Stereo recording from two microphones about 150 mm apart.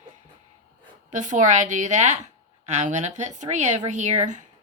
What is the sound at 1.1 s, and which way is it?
A woman's voice, 55° right (ahead or behind).